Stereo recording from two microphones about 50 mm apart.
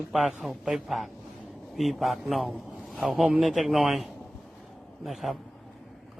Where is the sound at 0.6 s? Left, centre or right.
Centre.